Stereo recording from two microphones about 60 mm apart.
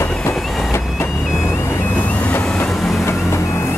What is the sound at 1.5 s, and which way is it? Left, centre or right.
Vehicle, left.